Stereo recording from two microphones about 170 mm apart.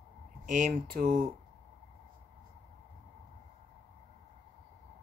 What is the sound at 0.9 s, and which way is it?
Speech, 60° right (ahead or behind).